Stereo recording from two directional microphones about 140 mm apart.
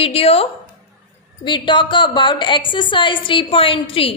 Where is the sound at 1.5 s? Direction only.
35° left (ahead or behind).